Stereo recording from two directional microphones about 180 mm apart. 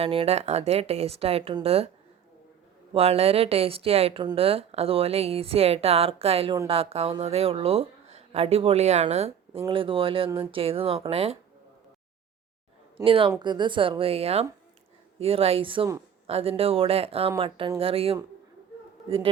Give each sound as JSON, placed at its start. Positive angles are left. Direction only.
{"t": 0.0, "sound": "speech", "side_deg": -35}
{"t": 2.9, "sound": "a woman's voice", "side_deg": -35}
{"t": 13.1, "sound": "a woman's voice", "side_deg": -30}